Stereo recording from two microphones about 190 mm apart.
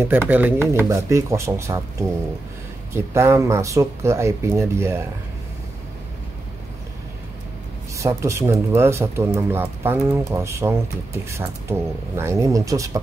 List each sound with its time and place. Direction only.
0.0 s speech: 10° right (ahead or behind)
7.9 s speech: 15° right (ahead or behind)